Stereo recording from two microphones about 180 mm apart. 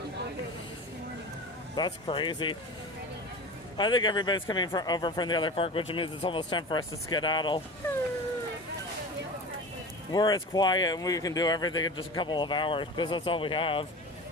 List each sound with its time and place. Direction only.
1.7 s speech: 25° left (ahead or behind)
3.8 s speech: 25° left (ahead or behind)
10.1 s speech: 25° left (ahead or behind)